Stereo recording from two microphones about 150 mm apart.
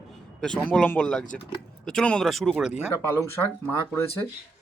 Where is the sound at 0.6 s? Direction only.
10° left (ahead or behind).